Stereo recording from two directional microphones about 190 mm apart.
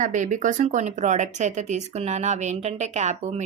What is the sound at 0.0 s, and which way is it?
Speech, 40° right (ahead or behind).